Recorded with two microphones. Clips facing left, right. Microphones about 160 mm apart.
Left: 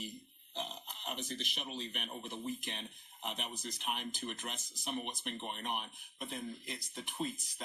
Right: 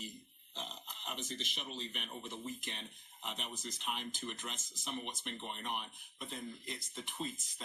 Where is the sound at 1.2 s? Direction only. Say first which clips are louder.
Left 2 dB; 20° right (ahead or behind).